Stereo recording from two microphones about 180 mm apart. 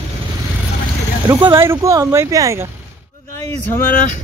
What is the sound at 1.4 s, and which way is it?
Speech, 15° right (ahead or behind).